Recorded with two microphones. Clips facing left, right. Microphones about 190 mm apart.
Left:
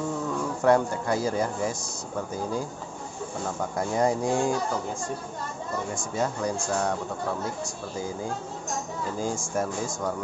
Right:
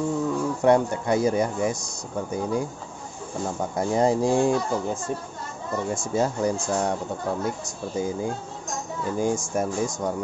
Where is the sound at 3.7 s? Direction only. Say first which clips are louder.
Right 4 dB; 25° right (ahead or behind).